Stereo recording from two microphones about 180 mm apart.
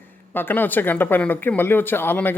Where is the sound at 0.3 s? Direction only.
10° left (ahead or behind).